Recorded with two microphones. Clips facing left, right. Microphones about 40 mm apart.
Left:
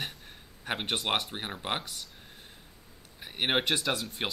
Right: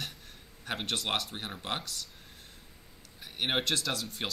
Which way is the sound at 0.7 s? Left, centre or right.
Left.